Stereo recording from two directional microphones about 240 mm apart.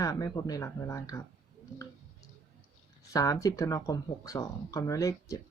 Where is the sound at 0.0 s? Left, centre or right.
Centre.